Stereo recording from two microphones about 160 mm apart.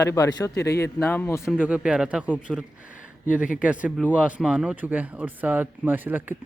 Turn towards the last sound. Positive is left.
turn(degrees=-10)  # may be behind; listen again after turning